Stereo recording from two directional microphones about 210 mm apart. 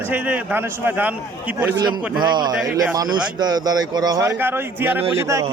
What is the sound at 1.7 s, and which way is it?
A man's voice, 20° right (ahead or behind).